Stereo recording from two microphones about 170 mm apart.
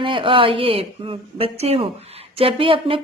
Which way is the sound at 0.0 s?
30° right (ahead or behind).